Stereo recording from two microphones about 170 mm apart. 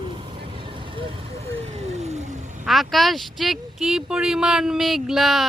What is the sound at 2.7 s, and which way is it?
Speech, centre (ahead or behind).